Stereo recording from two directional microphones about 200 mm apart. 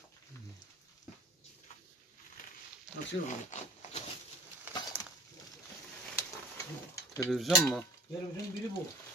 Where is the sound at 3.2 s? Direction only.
35° left (ahead or behind).